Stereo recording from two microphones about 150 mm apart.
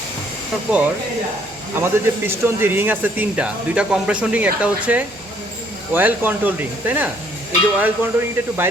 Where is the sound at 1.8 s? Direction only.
15° right (ahead or behind).